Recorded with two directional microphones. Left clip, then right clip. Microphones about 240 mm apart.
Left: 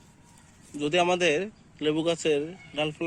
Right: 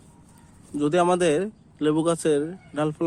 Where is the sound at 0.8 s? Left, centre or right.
Centre.